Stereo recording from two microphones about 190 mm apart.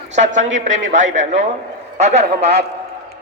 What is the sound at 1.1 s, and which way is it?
Speech, 40° right (ahead or behind).